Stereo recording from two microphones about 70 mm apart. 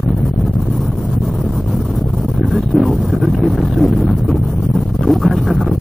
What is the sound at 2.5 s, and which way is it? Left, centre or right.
Vehicle, centre.